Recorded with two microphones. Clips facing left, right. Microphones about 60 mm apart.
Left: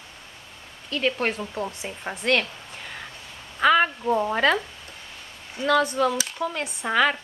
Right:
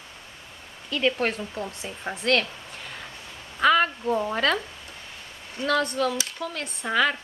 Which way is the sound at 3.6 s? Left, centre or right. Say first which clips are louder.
Left 1 dB; centre.